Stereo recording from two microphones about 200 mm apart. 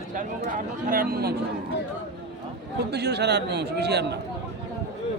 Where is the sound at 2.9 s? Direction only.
55° right (ahead or behind).